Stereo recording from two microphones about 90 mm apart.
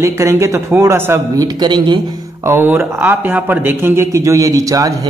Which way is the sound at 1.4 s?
55° right (ahead or behind).